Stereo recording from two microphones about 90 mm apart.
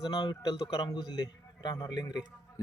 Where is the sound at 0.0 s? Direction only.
55° left (ahead or behind).